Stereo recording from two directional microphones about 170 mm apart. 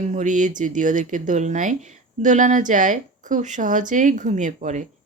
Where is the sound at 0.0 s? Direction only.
45° right (ahead or behind).